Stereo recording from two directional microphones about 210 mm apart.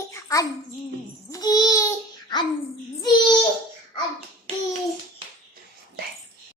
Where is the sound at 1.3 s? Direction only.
20° left (ahead or behind).